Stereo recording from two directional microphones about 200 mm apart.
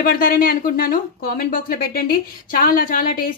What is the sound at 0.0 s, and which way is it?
Speech, 45° left (ahead or behind).